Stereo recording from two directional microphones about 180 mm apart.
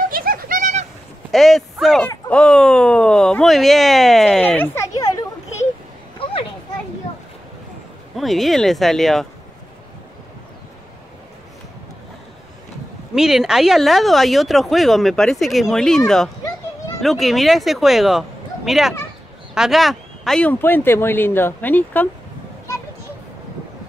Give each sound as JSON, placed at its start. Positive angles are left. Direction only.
{"t": 0.1, "sound": "a sound", "side_deg": -55}
{"t": 1.3, "sound": "speech", "side_deg": 0}
{"t": 6.2, "sound": "children playing", "side_deg": 30}
{"t": 8.2, "sound": "speech", "side_deg": 0}
{"t": 13.1, "sound": "speech", "side_deg": -5}
{"t": 17.0, "sound": "speech", "side_deg": 0}